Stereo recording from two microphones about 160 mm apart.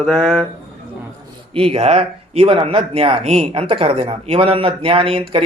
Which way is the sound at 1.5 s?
35° right (ahead or behind).